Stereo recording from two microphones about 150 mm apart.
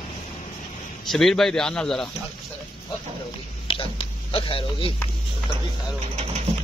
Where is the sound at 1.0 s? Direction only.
Centre (ahead or behind).